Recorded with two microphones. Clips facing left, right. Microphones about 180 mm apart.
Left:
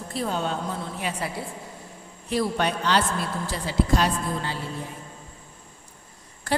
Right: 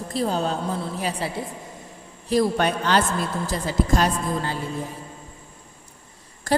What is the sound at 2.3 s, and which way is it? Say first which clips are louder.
A woman's voice: right 4 dB; 45° right (ahead or behind).